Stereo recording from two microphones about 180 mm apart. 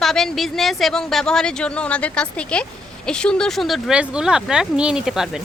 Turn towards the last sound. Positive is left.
turn(degrees=-5)  # may be behind; listen again after turning